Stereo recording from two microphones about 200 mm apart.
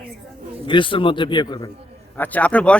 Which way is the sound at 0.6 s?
25° left (ahead or behind).